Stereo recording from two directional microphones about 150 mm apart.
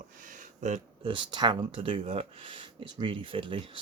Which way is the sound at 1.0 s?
30° right (ahead or behind).